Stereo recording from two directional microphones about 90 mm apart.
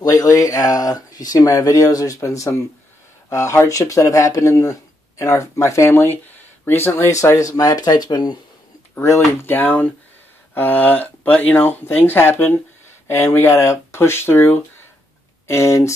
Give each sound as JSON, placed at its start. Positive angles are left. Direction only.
{"t": 0.0, "sound": "speech", "side_deg": 40}
{"t": 8.9, "sound": "speech", "side_deg": 30}